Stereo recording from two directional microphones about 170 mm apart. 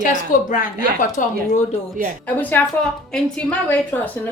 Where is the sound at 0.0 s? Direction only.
50° left (ahead or behind).